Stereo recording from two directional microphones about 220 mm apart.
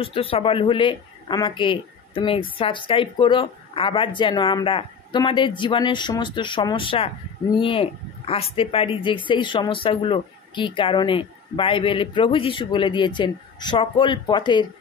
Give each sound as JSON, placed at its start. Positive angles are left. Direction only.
{"t": 0.0, "sound": "a woman's voice", "side_deg": 25}